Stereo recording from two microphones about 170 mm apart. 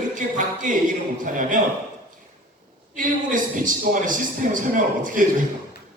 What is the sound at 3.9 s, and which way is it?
A man's voice, 50° right (ahead or behind).